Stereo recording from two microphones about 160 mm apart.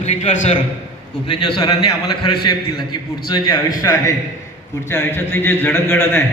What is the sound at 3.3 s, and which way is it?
A man's voice, 25° left (ahead or behind).